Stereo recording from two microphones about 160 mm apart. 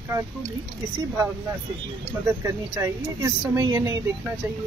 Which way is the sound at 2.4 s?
20° right (ahead or behind).